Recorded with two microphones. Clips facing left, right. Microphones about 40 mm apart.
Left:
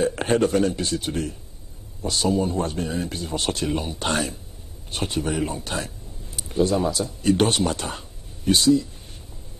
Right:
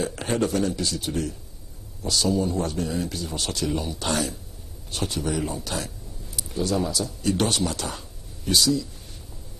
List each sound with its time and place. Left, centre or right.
0.1 s a man's voice: left